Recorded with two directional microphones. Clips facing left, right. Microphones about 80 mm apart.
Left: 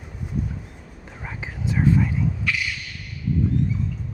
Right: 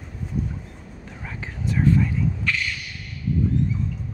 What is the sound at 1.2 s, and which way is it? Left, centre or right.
Whispering, centre.